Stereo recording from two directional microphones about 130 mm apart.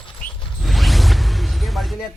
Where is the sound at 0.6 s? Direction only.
Centre (ahead or behind).